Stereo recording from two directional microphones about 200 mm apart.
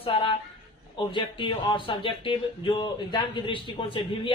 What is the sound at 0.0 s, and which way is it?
A woman's voice, 25° left (ahead or behind).